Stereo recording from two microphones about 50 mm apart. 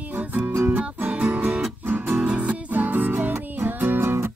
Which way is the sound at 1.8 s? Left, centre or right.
Right.